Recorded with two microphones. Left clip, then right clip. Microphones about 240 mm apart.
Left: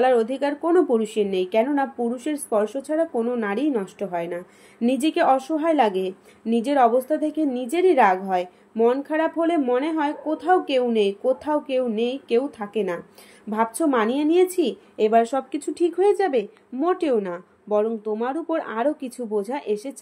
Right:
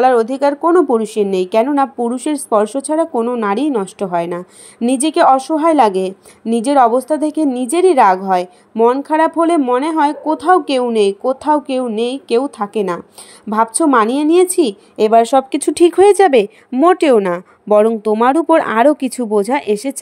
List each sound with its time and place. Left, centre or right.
0.0 s speech: right